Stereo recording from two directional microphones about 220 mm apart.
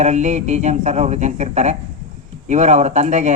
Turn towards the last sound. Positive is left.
turn(degrees=-30)  # may be behind; listen again after turning